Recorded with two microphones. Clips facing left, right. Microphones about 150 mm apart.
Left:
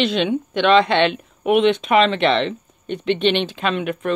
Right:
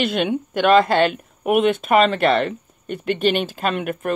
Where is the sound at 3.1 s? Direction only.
45° right (ahead or behind).